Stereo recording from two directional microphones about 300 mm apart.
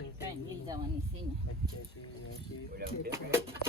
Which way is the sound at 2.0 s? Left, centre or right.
Left.